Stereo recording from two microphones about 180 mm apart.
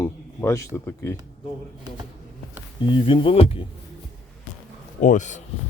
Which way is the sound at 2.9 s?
25° left (ahead or behind).